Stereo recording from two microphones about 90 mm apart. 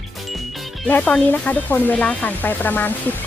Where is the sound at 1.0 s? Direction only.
10° left (ahead or behind).